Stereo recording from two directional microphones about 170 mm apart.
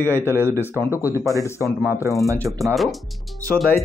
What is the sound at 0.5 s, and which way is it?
Speech, 15° left (ahead or behind).